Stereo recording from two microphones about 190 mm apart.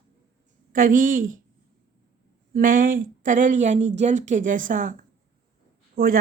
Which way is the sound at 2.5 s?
45° right (ahead or behind).